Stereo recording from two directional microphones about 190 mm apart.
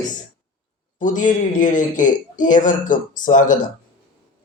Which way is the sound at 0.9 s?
40° left (ahead or behind).